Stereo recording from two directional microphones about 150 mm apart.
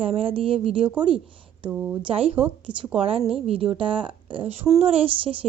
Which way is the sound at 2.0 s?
40° right (ahead or behind).